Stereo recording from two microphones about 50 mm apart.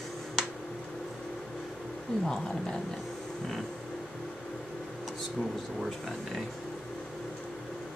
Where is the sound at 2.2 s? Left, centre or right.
Centre.